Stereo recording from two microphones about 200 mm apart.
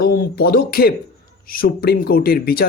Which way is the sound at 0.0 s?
50° left (ahead or behind).